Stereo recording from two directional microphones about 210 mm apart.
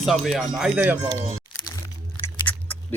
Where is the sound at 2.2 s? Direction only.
10° left (ahead or behind).